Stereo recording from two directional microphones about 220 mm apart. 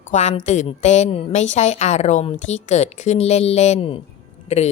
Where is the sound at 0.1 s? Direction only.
35° left (ahead or behind).